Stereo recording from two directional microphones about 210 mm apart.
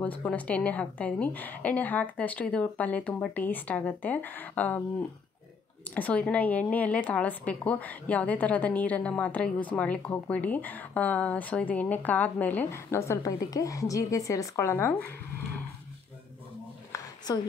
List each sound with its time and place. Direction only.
0.0 s a woman's voice: 5° left (ahead or behind)
5.9 s a woman's voice: 5° left (ahead or behind)
16.9 s a sound: 15° left (ahead or behind)